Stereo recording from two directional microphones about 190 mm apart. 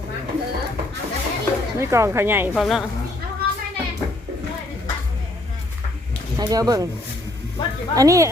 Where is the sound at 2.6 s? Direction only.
Centre (ahead or behind).